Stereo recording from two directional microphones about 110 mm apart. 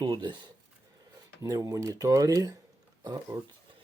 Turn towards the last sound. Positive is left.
turn(degrees=-35)  # may be behind; listen again after turning